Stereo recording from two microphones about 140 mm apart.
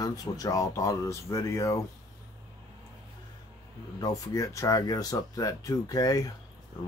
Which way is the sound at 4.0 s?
25° left (ahead or behind).